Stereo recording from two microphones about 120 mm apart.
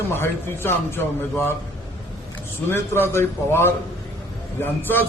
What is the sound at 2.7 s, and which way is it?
A man's voice, 20° left (ahead or behind).